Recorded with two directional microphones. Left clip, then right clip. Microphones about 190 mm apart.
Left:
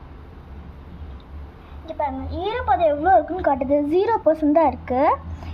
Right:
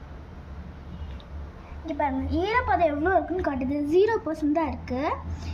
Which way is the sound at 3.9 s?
55° left (ahead or behind).